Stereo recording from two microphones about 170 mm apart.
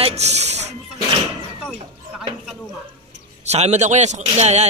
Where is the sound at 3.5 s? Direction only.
40° right (ahead or behind).